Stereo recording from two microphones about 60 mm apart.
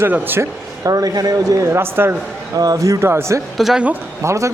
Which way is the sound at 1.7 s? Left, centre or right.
Right.